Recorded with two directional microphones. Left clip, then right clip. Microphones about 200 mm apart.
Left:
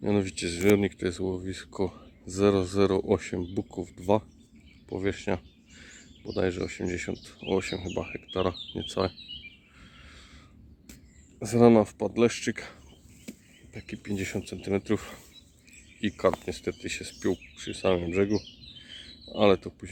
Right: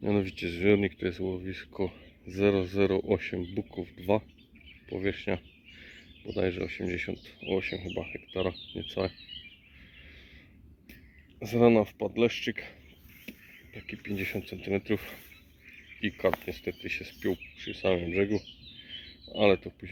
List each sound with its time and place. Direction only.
0.0 s speech: centre (ahead or behind)
11.3 s speech: 20° left (ahead or behind)
13.9 s speech: 10° left (ahead or behind)
16.0 s speech: 15° left (ahead or behind)
18.9 s a sound: 10° left (ahead or behind)